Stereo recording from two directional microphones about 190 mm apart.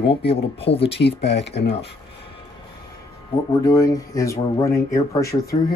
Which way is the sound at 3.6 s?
20° left (ahead or behind).